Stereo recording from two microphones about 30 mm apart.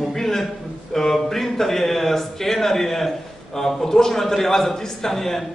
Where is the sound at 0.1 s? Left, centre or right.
Centre.